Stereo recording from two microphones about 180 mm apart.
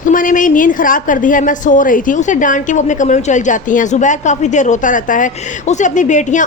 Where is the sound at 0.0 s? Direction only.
50° left (ahead or behind).